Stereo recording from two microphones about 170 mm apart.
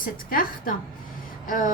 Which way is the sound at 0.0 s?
55° left (ahead or behind).